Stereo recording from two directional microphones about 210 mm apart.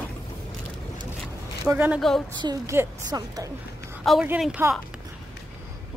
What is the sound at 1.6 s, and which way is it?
A woman's voice, 10° right (ahead or behind).